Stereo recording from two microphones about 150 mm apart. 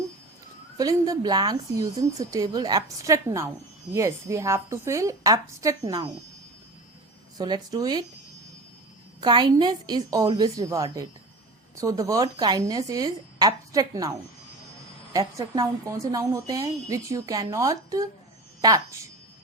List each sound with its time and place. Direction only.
0.8 s a woman's voice: 20° right (ahead or behind)
7.3 s a woman's voice: 30° right (ahead or behind)
9.2 s a woman's voice: 30° right (ahead or behind)
15.4 s a woman's voice: 20° right (ahead or behind)